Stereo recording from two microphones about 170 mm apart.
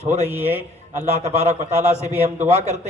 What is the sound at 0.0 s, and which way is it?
A man's voice, 40° right (ahead or behind).